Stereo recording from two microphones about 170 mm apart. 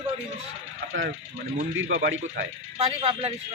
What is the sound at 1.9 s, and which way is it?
Speech, 90° right.